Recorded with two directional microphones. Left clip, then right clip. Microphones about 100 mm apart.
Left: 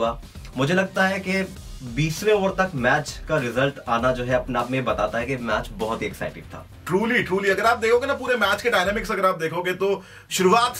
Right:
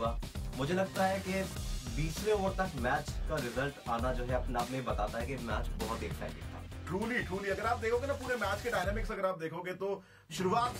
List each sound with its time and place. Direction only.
0.6 s speech: 10° right (ahead or behind)
6.9 s speech: 5° left (ahead or behind)